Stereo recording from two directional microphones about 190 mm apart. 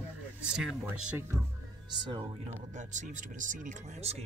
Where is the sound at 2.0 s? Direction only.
25° right (ahead or behind).